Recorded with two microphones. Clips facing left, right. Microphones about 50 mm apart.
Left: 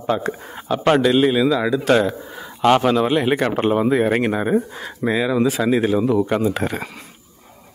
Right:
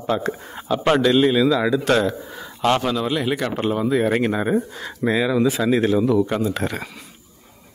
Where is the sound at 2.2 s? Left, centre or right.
Centre.